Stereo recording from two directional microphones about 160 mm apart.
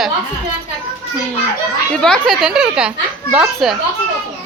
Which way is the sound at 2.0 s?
5° left (ahead or behind).